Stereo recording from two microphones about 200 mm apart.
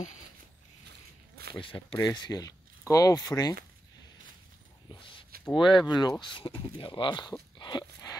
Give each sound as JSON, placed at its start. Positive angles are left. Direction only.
{"t": 1.5, "sound": "speech", "side_deg": 25}
{"t": 5.6, "sound": "speech", "side_deg": 25}
{"t": 7.5, "sound": "a sound", "side_deg": 20}